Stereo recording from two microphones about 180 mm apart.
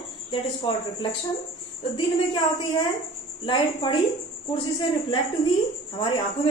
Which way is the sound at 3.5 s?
25° left (ahead or behind).